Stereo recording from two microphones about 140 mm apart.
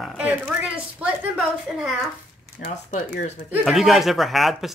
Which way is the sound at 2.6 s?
55° left (ahead or behind).